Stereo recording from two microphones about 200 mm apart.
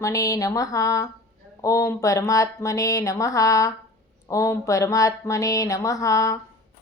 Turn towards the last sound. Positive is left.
turn(degrees=15)  # may be behind; listen again after turning